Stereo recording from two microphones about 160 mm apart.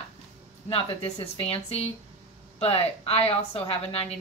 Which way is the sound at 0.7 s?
35° left (ahead or behind).